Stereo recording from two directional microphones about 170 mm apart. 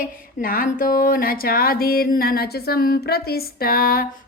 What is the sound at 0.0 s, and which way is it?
A woman's voice, 55° left (ahead or behind).